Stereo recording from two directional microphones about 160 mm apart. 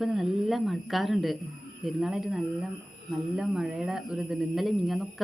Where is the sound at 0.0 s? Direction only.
Centre (ahead or behind).